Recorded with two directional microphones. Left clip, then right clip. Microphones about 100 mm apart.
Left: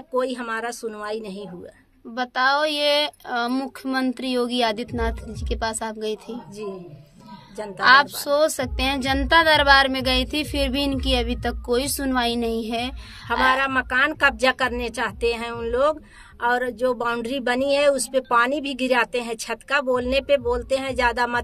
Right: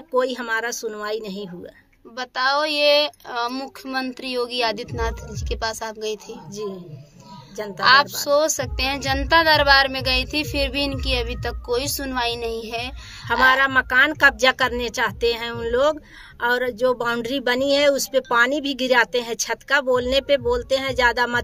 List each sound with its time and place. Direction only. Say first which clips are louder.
0.1 s speech: right 3 dB; 25° right (ahead or behind)
2.1 s a woman's voice: left 1 dB; 35° left (ahead or behind)
7.5 s speech: right 2 dB; 20° right (ahead or behind)
7.8 s a woman's voice: even; 35° left (ahead or behind)
13.5 s speech: right 4 dB; 25° right (ahead or behind)